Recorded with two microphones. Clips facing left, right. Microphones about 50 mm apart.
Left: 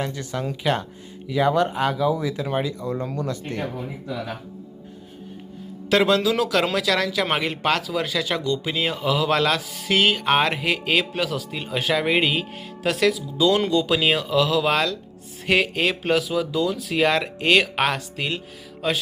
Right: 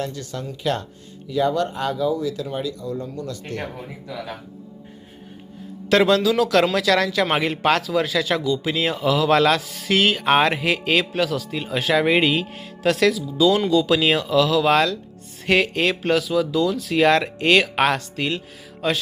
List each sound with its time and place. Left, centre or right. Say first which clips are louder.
0.0 s speech: left 1 dB; left
6.4 s speech: right 3 dB; centre